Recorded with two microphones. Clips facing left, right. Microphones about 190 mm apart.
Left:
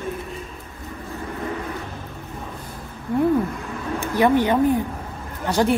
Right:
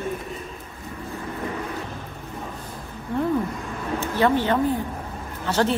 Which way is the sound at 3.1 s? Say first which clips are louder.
Left 4 dB; 10° left (ahead or behind).